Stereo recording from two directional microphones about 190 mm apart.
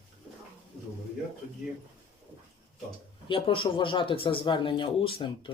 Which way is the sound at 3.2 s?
25° left (ahead or behind).